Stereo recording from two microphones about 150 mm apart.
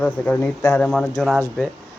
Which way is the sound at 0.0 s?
10° left (ahead or behind).